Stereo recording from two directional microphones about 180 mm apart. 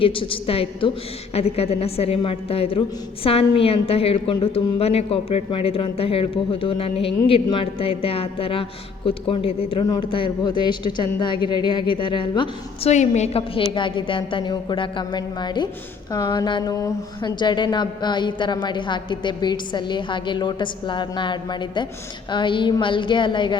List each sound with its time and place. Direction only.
0.0 s a woman's voice: 30° left (ahead or behind)
12.9 s a woman's voice: 40° left (ahead or behind)